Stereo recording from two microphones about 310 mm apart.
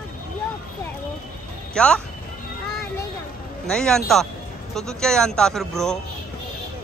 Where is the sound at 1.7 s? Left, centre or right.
Centre.